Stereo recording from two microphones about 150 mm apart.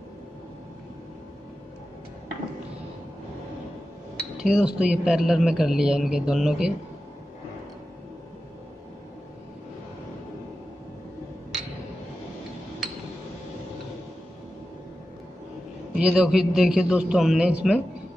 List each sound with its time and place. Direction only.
4.2 s speech: 5° right (ahead or behind)
16.0 s speech: 5° right (ahead or behind)